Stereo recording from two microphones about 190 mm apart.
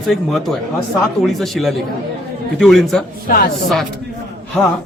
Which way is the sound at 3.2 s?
45° left (ahead or behind).